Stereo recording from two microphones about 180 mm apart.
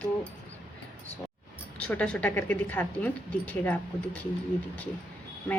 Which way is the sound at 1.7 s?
5° left (ahead or behind).